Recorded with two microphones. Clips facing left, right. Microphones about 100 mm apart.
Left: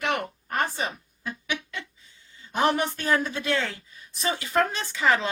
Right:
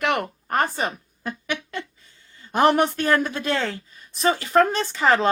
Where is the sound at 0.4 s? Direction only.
45° right (ahead or behind).